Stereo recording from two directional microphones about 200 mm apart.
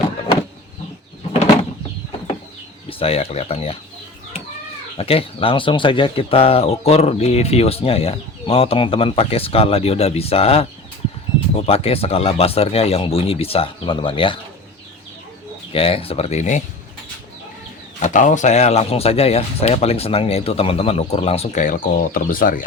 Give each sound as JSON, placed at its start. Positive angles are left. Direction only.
{"t": 3.0, "sound": "speech", "side_deg": 30}
{"t": 4.9, "sound": "speech", "side_deg": 30}
{"t": 15.7, "sound": "speech", "side_deg": 30}
{"t": 18.0, "sound": "speech", "side_deg": 40}